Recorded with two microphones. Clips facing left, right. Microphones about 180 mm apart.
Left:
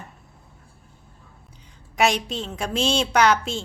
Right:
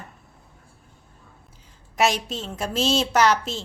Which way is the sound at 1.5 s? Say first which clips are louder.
Left 3 dB; 5° right (ahead or behind).